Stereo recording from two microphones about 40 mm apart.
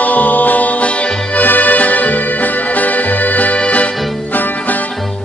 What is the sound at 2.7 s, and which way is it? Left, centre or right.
Music, left.